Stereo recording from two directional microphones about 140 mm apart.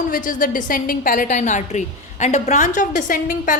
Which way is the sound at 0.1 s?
70° left (ahead or behind).